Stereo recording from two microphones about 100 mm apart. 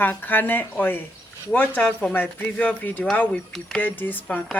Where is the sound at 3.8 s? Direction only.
20° left (ahead or behind).